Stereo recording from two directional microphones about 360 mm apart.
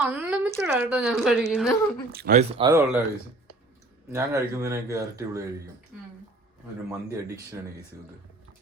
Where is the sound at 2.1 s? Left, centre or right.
Right.